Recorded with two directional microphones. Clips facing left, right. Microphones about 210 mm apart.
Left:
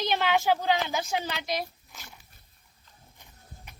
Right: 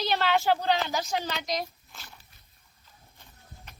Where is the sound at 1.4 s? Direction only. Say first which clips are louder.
Even; 5° left (ahead or behind).